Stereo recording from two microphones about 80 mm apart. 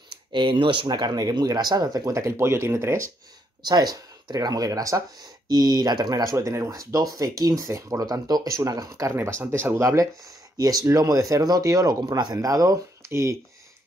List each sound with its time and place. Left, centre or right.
0.3 s speech: right
1.1 s speech: right
3.6 s speech: right
5.2 s speech: right
6.3 s speech: right
9.1 s speech: right
10.6 s speech: right
13.1 s speech: right